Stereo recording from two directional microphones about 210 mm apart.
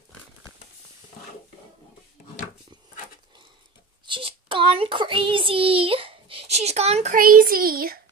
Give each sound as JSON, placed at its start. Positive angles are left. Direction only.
{"t": 4.0, "sound": "child singing", "side_deg": -25}